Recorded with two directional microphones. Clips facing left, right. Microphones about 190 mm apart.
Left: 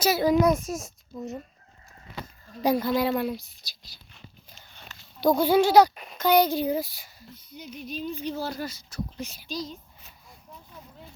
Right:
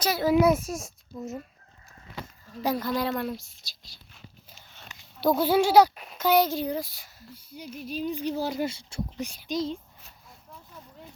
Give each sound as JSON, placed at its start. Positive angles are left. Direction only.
{"t": 0.0, "sound": "a child's voice", "side_deg": 5}
{"t": 0.3, "sound": "speech", "side_deg": -5}
{"t": 2.6, "sound": "a sound", "side_deg": 10}
{"t": 5.2, "sound": "speech", "side_deg": -5}